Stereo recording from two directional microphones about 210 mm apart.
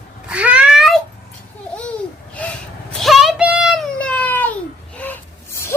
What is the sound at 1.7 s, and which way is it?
Babbling, 5° left (ahead or behind).